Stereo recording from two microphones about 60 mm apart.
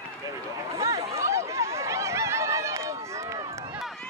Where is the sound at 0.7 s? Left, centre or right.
Right.